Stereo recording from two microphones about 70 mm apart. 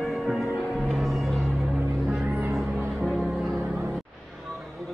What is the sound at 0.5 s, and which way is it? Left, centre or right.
Music, centre.